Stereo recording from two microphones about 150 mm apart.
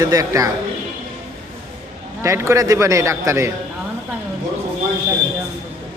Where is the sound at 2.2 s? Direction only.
20° right (ahead or behind).